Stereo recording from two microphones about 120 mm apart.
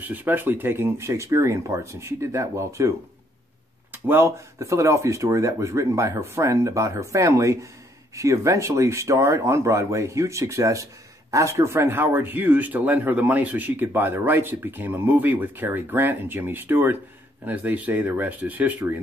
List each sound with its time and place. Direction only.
0.1 s speech: 15° right (ahead or behind)
3.9 s speech: 20° right (ahead or behind)